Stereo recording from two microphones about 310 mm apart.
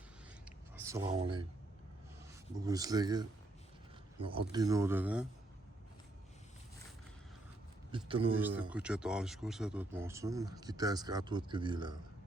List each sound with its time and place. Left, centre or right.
0.8 s speech: centre
2.6 s speech: centre
7.9 s speech: centre
8.4 s speech: centre